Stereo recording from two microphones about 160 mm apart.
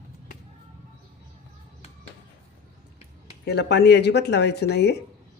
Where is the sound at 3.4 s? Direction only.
90° left.